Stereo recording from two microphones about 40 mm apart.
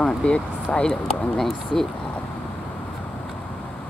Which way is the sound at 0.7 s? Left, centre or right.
Centre.